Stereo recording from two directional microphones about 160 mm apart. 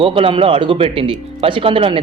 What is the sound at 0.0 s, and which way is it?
Speech, 35° right (ahead or behind).